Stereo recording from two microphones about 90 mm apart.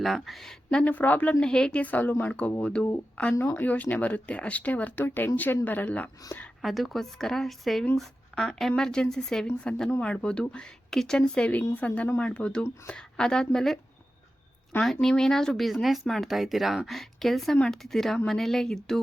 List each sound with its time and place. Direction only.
0.0 s a woman's voice: centre (ahead or behind); by 6.1 s 20° left (ahead or behind)
6.6 s a woman's voice: centre (ahead or behind)
15.0 s speech: 5° left (ahead or behind)